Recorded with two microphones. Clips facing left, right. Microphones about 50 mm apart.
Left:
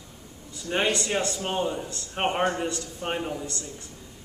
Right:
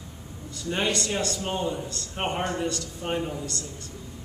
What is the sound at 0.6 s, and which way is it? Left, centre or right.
A man's voice, left.